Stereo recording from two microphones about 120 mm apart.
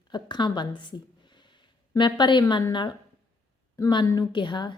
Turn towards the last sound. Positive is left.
turn(degrees=40)  # may be behind; listen again after turning